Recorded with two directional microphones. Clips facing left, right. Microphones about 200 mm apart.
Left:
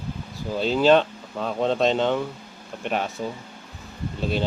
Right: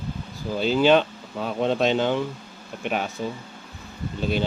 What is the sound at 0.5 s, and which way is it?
Speech, centre (ahead or behind).